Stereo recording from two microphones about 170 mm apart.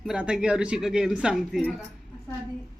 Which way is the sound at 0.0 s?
5° right (ahead or behind).